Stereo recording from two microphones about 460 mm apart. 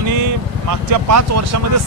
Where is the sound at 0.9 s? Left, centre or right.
Right.